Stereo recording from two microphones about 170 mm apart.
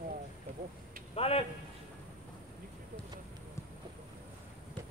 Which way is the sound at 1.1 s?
35° left (ahead or behind).